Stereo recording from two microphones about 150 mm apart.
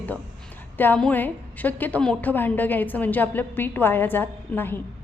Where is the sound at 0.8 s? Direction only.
10° left (ahead or behind).